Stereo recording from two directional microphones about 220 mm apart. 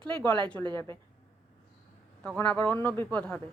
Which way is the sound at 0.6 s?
20° right (ahead or behind).